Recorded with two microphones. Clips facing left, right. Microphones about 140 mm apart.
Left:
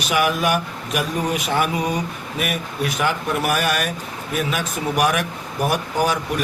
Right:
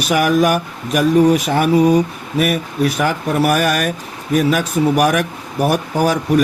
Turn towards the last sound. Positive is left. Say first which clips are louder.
# right 6 dB
turn(degrees=-45)  # may be behind; listen again after turning